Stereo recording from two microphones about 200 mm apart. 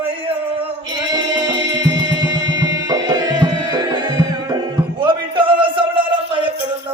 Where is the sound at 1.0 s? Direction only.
20° right (ahead or behind).